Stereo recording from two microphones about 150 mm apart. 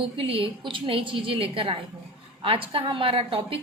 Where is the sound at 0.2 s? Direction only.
35° right (ahead or behind).